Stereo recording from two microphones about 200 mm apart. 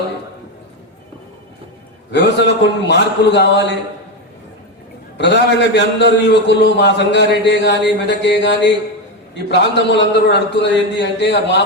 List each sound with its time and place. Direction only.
2.1 s a man's voice: 60° left (ahead or behind)
5.1 s a man's voice: 60° left (ahead or behind)